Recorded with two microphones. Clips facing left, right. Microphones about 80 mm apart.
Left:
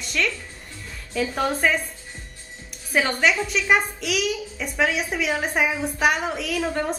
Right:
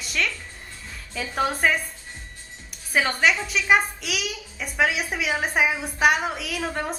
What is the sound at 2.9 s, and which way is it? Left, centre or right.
A woman's voice, centre.